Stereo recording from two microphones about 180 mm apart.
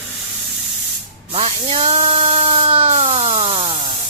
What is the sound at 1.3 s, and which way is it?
Speech, 35° right (ahead or behind).